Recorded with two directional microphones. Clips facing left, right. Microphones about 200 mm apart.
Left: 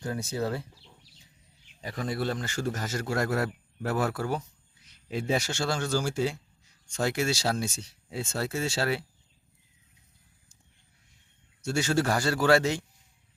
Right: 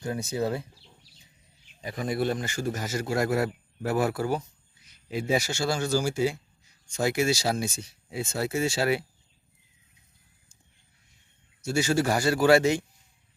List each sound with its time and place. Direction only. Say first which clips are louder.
0.1 s speech: right 3 dB; 15° right (ahead or behind)
1.9 s speech: right 3 dB; 15° right (ahead or behind)
11.6 s speech: right 2 dB; 5° right (ahead or behind)